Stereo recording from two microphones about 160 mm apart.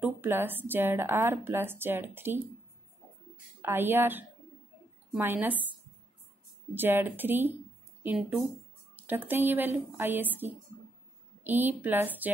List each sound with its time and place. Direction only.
0.0 s a woman's voice: 15° right (ahead or behind)
3.6 s a woman's voice: 15° right (ahead or behind)
6.7 s a woman's voice: 15° right (ahead or behind)